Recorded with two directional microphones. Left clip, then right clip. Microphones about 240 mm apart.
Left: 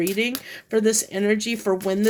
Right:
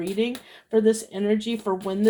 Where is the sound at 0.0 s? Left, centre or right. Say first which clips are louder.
Left 3 dB; left.